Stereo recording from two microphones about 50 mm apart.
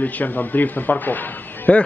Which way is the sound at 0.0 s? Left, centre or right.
Left.